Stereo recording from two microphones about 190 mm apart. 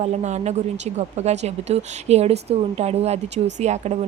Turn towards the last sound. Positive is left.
turn(degrees=-35)  # may be behind; listen again after turning